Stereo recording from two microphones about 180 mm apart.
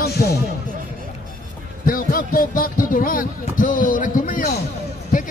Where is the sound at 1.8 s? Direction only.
50° left (ahead or behind).